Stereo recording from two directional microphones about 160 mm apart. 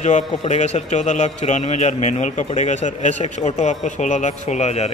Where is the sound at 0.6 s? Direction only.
45° left (ahead or behind).